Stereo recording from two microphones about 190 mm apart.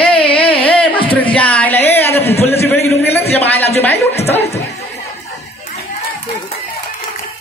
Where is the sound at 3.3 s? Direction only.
10° left (ahead or behind).